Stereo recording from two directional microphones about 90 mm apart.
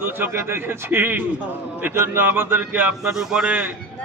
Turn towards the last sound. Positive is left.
turn(degrees=-10)  # may be behind; listen again after turning